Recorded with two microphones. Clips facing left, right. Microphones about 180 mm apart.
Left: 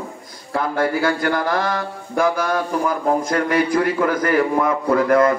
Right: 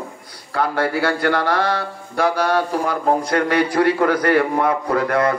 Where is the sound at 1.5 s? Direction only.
45° left (ahead or behind).